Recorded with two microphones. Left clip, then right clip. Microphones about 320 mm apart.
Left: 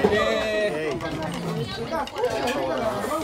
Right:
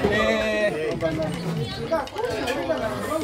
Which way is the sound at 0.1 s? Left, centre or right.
Centre.